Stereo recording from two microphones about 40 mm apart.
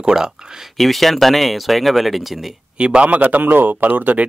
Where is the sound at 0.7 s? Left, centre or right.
Centre.